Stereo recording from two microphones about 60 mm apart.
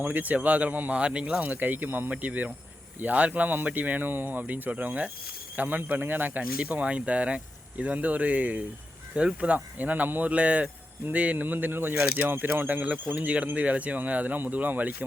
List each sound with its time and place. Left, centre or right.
0.0 s speech: right
1.5 s speech: right